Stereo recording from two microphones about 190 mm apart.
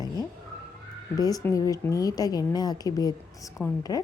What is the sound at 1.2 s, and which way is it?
Speech, 20° left (ahead or behind).